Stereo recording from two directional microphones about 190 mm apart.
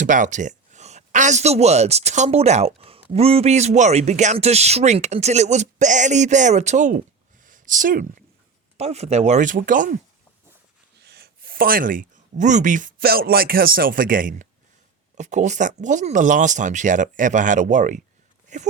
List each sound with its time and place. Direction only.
0.0 s speech: 40° right (ahead or behind)
7.4 s a sound: 45° right (ahead or behind)
8.8 s speech: 35° right (ahead or behind)
11.0 s speech: 55° right (ahead or behind); by 18.7 s 40° right (ahead or behind)